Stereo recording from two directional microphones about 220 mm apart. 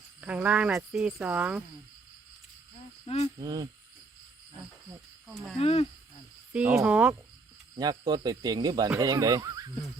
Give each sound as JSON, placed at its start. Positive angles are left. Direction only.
{"t": 0.2, "sound": "speech", "side_deg": -5}
{"t": 3.3, "sound": "a man's voice", "side_deg": -15}
{"t": 5.5, "sound": "speech", "side_deg": 30}
{"t": 6.5, "sound": "a man's voice", "side_deg": -5}
{"t": 7.8, "sound": "a man's voice", "side_deg": -20}